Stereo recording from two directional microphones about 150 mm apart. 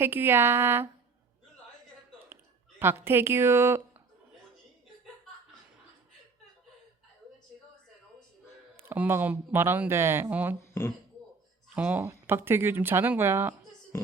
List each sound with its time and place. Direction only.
0.0 s speech: 15° right (ahead or behind)
2.1 s a sound: 15° right (ahead or behind)
8.9 s speech: 15° right (ahead or behind)
10.6 s speech: 15° left (ahead or behind)
11.7 s speech: 10° right (ahead or behind)
13.9 s music: 15° left (ahead or behind)